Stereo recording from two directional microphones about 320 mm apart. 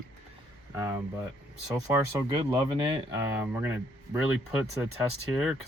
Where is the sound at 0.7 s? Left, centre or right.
Centre.